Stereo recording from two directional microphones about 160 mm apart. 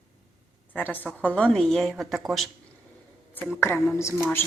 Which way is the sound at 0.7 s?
10° left (ahead or behind).